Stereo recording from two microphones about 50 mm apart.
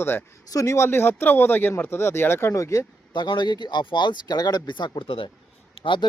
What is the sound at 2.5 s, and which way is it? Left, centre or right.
Speech, left.